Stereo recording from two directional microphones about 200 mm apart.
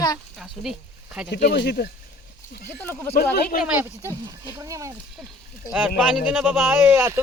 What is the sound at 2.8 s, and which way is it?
Speech, 10° left (ahead or behind).